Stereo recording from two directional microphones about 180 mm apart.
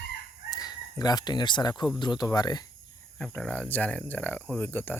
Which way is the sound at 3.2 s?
5° left (ahead or behind).